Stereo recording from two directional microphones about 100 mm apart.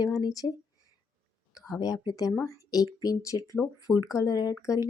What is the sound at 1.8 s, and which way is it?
A woman's voice, 40° left (ahead or behind).